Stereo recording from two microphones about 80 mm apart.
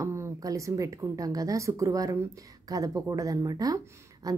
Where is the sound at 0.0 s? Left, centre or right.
Right.